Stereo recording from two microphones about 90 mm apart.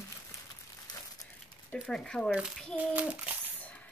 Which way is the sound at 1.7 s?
5° left (ahead or behind).